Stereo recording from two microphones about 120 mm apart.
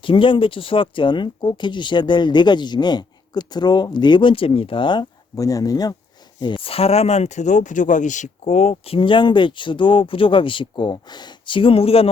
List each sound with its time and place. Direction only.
0.0 s speech: 45° left (ahead or behind)
6.4 s speech: 45° left (ahead or behind); by 8.7 s 65° left (ahead or behind)
8.7 s speech: 50° left (ahead or behind)